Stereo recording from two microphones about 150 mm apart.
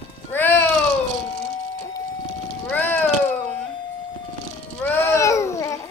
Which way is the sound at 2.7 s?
10° left (ahead or behind).